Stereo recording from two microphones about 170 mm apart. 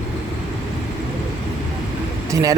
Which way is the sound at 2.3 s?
20° right (ahead or behind).